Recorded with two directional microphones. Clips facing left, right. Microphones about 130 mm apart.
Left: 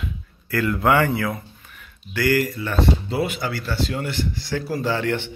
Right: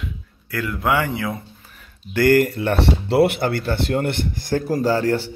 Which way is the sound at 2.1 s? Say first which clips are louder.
Right 5 dB; 50° right (ahead or behind).